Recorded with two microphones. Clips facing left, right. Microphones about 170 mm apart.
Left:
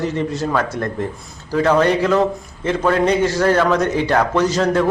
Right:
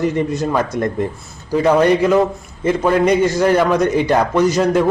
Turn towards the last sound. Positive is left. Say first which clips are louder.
# right 2 dB
turn(degrees=-10)  # may be behind; listen again after turning